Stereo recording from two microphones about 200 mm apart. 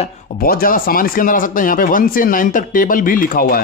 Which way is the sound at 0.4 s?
45° left (ahead or behind).